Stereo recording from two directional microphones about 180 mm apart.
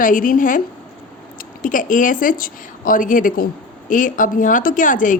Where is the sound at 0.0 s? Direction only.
50° left (ahead or behind).